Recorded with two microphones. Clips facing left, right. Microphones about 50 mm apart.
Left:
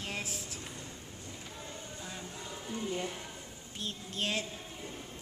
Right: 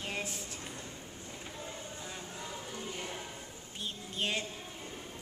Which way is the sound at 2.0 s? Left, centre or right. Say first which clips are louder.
Even; centre.